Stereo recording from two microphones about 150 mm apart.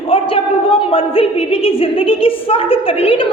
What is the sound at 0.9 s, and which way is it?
A woman's voice, 40° left (ahead or behind).